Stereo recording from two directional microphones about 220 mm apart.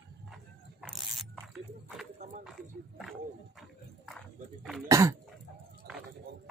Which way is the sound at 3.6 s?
Centre (ahead or behind).